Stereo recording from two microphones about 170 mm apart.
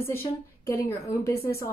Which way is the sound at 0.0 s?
15° left (ahead or behind).